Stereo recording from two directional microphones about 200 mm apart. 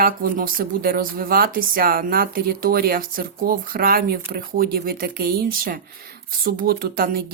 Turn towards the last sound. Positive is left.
turn(degrees=-50)  # may be behind; listen again after turning